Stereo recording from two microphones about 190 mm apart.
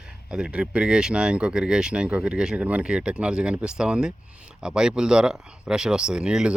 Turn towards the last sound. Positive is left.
turn(degrees=-5)  # may be behind; listen again after turning